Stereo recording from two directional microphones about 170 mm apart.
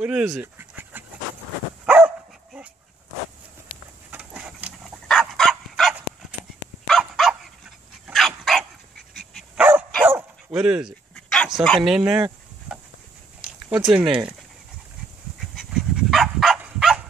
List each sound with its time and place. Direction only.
0.0 s speech: 5° right (ahead or behind)
1.9 s dog: 5° right (ahead or behind)
4.1 s a sound: 10° right (ahead or behind)
5.0 s dog: 5° left (ahead or behind)
13.4 s a sound: 5° right (ahead or behind)
13.9 s speech: 5° right (ahead or behind)
15.5 s dog: centre (ahead or behind)